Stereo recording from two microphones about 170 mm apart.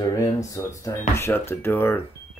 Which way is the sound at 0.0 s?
20° left (ahead or behind).